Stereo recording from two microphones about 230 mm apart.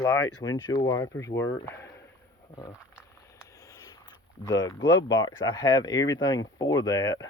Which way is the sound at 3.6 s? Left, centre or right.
Centre.